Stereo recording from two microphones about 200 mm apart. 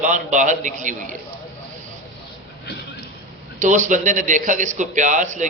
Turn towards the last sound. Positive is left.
turn(degrees=-40)  # may be behind; listen again after turning